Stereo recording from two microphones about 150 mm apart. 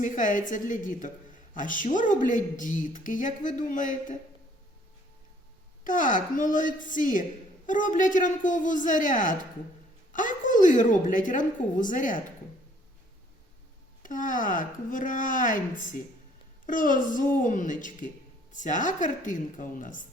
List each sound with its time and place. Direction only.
0.0 s a woman's voice: 60° left (ahead or behind)
5.8 s a woman's voice: 60° left (ahead or behind)
14.0 s a woman's voice: 60° left (ahead or behind)